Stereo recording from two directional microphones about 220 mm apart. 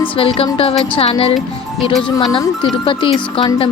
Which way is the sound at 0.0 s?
25° left (ahead or behind).